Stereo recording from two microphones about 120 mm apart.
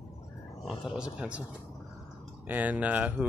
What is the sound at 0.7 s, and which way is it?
Speech, 5° right (ahead or behind).